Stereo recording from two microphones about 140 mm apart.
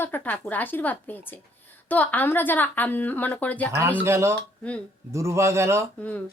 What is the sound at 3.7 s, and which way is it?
Speech, 20° right (ahead or behind).